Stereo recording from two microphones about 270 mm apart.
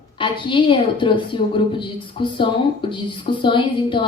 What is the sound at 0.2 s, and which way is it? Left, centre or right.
A woman's voice, centre.